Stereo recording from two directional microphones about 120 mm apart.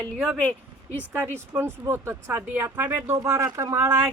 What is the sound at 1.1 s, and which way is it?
Speech, 20° right (ahead or behind).